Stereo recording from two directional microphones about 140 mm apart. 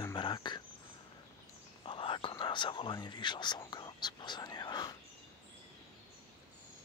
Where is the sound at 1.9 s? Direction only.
40° left (ahead or behind).